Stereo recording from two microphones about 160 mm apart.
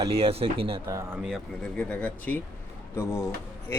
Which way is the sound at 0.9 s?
20° right (ahead or behind).